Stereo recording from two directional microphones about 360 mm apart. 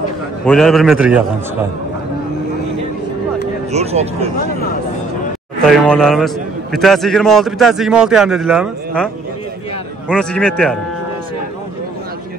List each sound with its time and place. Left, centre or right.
0.5 s a man's voice: centre
3.7 s speech: centre
5.7 s a man's voice: centre